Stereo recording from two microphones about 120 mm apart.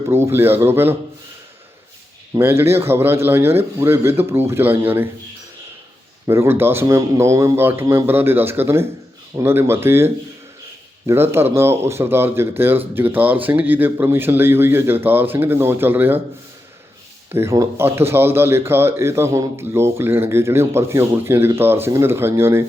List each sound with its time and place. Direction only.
0.1 s speech: 20° right (ahead or behind)
2.4 s speech: 20° right (ahead or behind)
6.2 s speech: 20° right (ahead or behind)
17.3 s speech: 25° right (ahead or behind)